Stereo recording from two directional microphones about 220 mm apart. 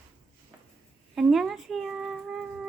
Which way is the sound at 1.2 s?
Centre (ahead or behind).